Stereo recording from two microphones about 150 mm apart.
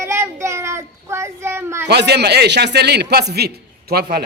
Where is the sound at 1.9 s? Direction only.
90° right.